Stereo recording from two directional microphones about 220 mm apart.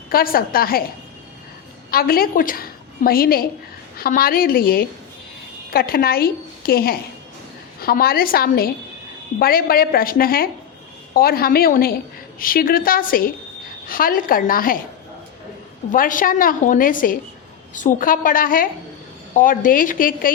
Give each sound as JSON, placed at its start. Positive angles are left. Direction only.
{"t": 0.1, "sound": "a woman's voice", "side_deg": 40}
{"t": 1.9, "sound": "a woman's voice", "side_deg": 40}
{"t": 15.9, "sound": "a woman's voice", "side_deg": 35}